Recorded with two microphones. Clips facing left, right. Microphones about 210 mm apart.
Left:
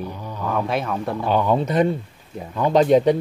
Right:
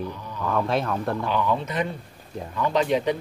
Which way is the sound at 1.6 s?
40° left (ahead or behind).